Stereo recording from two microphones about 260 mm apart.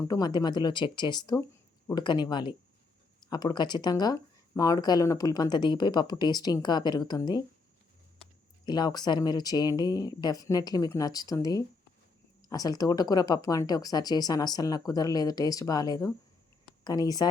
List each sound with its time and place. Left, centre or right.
0.1 s speech: centre
8.6 s speech: centre